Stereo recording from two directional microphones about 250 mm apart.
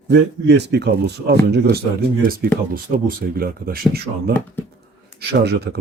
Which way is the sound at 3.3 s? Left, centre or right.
Right.